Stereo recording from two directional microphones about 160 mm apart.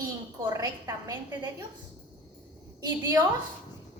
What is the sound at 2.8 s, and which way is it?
Speech, 20° right (ahead or behind).